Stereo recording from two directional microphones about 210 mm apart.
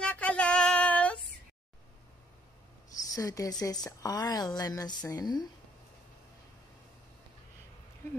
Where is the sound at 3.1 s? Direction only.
15° left (ahead or behind).